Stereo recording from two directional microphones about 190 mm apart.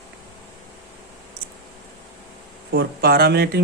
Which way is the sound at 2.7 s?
55° right (ahead or behind).